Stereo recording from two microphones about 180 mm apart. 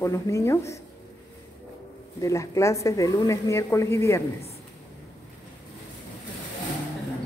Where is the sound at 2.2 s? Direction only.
15° left (ahead or behind).